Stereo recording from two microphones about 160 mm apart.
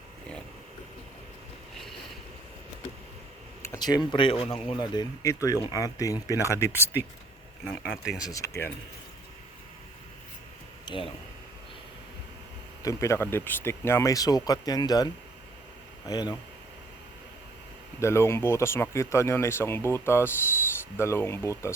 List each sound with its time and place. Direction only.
3.6 s speech: 20° left (ahead or behind)
7.6 s speech: 5° left (ahead or behind)
8.3 s speech: 20° left (ahead or behind)
10.8 s speech: 30° left (ahead or behind)
12.8 s speech: 20° left (ahead or behind)
18.0 s speech: 15° left (ahead or behind)